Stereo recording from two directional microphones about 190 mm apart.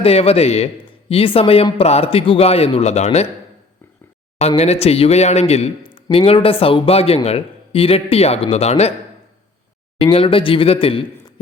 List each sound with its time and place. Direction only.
0.0 s a man's voice: 30° left (ahead or behind)
4.4 s a man's voice: 35° left (ahead or behind)
10.0 s speech: 30° left (ahead or behind)